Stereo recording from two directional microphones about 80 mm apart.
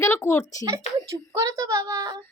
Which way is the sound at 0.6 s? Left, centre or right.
Right.